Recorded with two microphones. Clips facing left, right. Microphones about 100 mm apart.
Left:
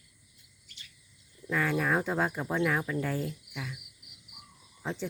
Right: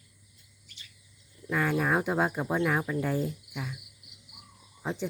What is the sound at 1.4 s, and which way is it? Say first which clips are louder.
Speech: right 1 dB; 10° right (ahead or behind).